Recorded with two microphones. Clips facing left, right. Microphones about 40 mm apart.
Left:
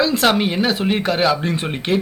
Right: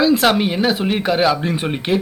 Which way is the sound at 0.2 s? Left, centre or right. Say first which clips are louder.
Right 1 dB; centre.